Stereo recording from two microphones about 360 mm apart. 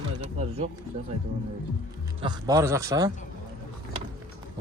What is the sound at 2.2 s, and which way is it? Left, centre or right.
Speech, centre.